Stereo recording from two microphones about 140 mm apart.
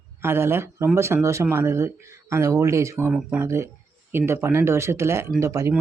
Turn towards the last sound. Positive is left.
turn(degrees=-20)  # may be behind; listen again after turning